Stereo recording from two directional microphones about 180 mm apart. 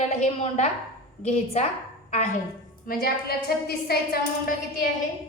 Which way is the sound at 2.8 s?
55° left (ahead or behind).